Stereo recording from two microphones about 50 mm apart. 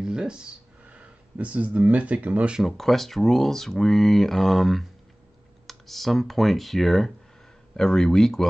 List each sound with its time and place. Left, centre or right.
0.0 s speech: centre
0.8 s speech: right
2.6 s speech: centre